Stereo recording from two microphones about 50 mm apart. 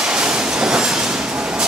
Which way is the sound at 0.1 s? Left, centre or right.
Centre.